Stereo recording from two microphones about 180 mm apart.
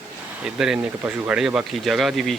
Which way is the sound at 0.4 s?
5° right (ahead or behind).